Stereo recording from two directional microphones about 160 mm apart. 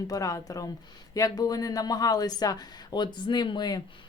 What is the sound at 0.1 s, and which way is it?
A woman's voice, 20° left (ahead or behind).